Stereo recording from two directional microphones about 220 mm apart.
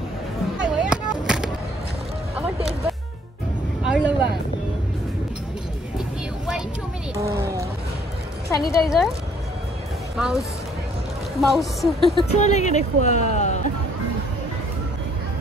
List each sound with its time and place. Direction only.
0.6 s music: 5° right (ahead or behind)
2.3 s a sound: 5° right (ahead or behind)
3.8 s vehicle: 5° right (ahead or behind)
5.9 s vehicle: 5° right (ahead or behind)
7.2 s music: 15° right (ahead or behind)
8.5 s music: 15° left (ahead or behind)
8.8 s speech: centre (ahead or behind)
10.1 s speech: centre (ahead or behind)
11.4 s speech: centre (ahead or behind)
12.4 s speech: 30° left (ahead or behind)